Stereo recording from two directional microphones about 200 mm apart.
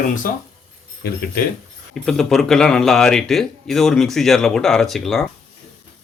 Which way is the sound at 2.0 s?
Centre (ahead or behind).